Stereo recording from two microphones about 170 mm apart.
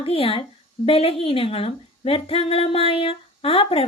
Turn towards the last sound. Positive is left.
turn(degrees=35)  # may be behind; listen again after turning